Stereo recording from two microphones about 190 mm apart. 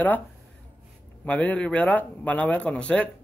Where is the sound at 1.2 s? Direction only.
5° left (ahead or behind).